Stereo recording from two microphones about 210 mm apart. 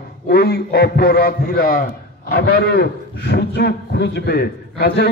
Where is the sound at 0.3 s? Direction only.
50° left (ahead or behind).